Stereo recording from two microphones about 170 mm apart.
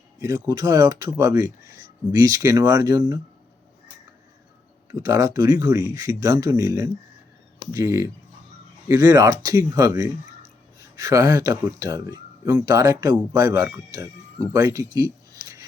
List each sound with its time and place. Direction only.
0.2 s speech: 20° right (ahead or behind)
4.9 s speech: 20° right (ahead or behind)